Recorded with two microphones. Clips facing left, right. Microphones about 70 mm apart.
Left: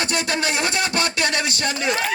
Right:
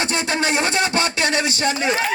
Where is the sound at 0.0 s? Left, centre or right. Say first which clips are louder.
Right 2 dB; right.